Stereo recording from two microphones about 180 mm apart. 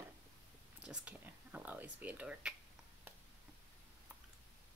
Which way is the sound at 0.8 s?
5° right (ahead or behind).